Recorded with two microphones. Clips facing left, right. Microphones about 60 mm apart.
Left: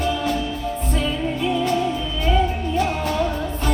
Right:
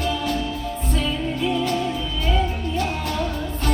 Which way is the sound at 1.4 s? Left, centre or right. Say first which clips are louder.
Left 2 dB; centre.